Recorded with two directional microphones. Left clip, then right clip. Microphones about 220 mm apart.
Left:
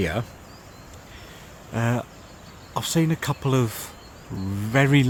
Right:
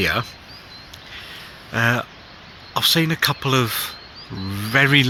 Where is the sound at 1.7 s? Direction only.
5° left (ahead or behind).